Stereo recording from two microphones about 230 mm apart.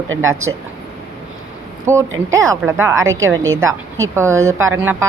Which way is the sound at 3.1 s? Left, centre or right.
Right.